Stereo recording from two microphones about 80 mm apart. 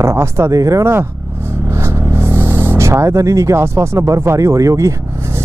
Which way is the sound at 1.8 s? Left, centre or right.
Right.